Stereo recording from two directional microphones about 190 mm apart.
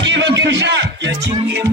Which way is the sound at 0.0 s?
70° right (ahead or behind).